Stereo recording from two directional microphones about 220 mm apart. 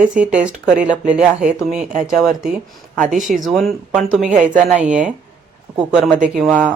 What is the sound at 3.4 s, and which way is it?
Speech, centre (ahead or behind).